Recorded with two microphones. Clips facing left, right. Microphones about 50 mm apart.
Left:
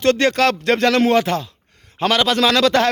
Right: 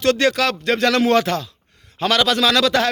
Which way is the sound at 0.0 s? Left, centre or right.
Left.